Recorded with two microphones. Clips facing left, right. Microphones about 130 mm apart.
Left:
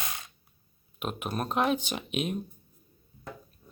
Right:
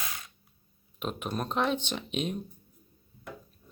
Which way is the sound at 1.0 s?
5° left (ahead or behind).